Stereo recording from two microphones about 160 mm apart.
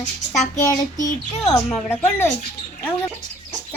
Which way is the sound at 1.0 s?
50° left (ahead or behind).